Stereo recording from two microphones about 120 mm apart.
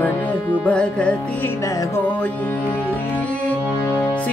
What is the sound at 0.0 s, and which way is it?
Music, 15° left (ahead or behind).